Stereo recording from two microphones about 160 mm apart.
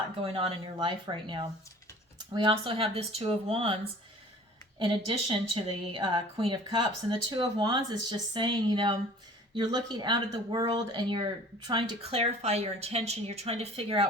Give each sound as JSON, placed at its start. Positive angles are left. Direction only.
{"t": 0.3, "sound": "speech", "side_deg": -35}
{"t": 4.8, "sound": "speech", "side_deg": -35}